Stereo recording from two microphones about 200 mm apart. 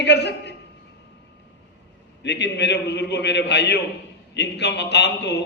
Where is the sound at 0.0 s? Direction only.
60° left (ahead or behind).